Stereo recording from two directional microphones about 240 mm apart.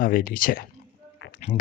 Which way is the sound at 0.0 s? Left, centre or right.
Left.